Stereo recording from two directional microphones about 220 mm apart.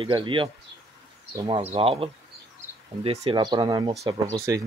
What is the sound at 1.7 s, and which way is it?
Speech, 25° right (ahead or behind).